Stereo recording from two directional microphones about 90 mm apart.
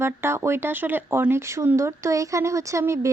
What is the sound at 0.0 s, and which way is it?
Speech, 30° right (ahead or behind).